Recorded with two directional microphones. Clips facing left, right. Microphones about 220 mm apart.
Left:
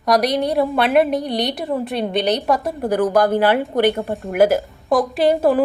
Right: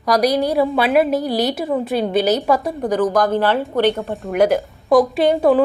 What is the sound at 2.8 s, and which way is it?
A woman's voice, 10° left (ahead or behind).